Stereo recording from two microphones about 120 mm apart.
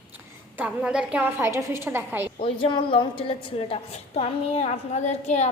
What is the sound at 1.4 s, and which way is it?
Speech, 25° right (ahead or behind).